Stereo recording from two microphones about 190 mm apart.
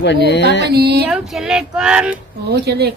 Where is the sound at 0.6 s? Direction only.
60° right (ahead or behind).